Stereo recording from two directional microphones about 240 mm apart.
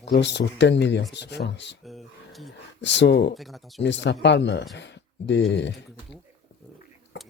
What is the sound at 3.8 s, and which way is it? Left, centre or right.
Speech, left.